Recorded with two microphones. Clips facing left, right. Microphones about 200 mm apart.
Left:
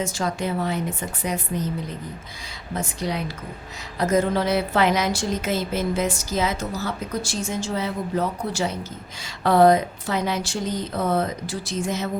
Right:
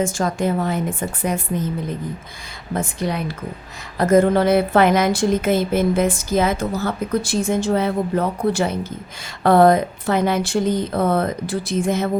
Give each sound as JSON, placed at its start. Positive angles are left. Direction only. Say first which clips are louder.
{"t": 0.0, "sound": "speech", "louder": "right 5 dB", "side_deg": -50}
{"t": 2.7, "sound": "a woman's voice", "louder": "right 4 dB", "side_deg": -55}